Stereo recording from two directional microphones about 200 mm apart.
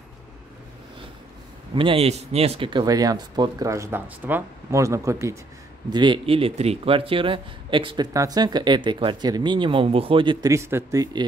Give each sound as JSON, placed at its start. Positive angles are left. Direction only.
{"t": 1.8, "sound": "speech", "side_deg": -30}